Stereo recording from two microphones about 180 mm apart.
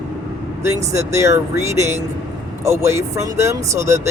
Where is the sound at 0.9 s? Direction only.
15° right (ahead or behind).